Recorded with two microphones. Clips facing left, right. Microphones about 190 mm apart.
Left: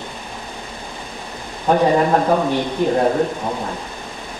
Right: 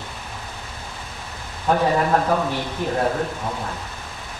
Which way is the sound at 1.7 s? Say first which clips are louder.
Left 4 dB; 20° left (ahead or behind).